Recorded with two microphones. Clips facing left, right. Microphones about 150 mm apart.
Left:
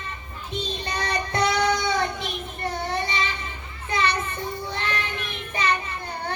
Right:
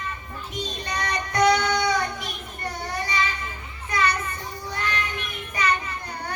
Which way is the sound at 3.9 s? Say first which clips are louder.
Even; 25° left (ahead or behind).